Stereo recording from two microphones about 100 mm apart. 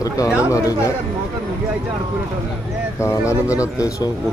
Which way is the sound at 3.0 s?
30° left (ahead or behind).